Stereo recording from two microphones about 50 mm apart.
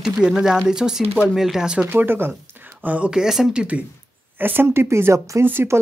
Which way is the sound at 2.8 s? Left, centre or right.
Right.